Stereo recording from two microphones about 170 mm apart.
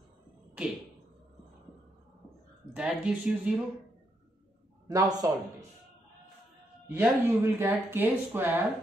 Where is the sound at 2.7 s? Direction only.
5° right (ahead or behind).